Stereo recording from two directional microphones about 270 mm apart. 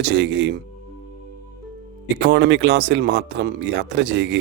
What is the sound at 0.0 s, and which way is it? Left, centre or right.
Speech, right.